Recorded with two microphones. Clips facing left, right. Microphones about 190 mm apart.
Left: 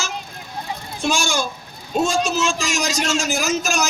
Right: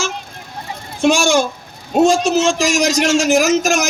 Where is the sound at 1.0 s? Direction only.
80° right.